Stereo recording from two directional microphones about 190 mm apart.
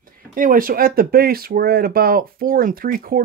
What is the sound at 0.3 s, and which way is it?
Speech, 45° right (ahead or behind).